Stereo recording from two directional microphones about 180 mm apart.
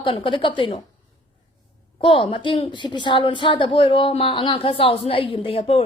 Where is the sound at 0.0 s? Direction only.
30° left (ahead or behind).